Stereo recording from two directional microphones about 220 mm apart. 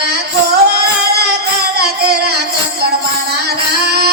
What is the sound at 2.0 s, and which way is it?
Music, 45° right (ahead or behind).